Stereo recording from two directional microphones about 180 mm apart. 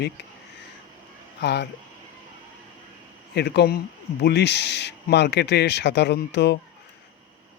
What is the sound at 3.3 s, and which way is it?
Speech, 65° left (ahead or behind).